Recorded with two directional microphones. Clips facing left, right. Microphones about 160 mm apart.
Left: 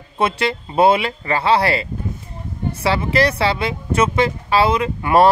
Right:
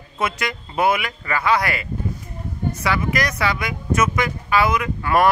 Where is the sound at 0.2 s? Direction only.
30° left (ahead or behind).